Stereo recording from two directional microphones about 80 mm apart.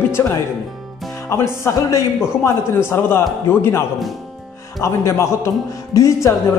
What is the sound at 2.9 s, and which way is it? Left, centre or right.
Speech, left.